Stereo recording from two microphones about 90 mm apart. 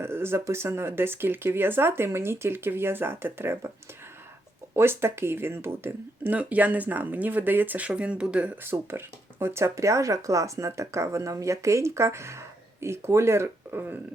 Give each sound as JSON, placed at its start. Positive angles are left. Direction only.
{"t": 0.0, "sound": "speech", "side_deg": -25}
{"t": 4.7, "sound": "speech", "side_deg": -25}
{"t": 8.6, "sound": "speech", "side_deg": -25}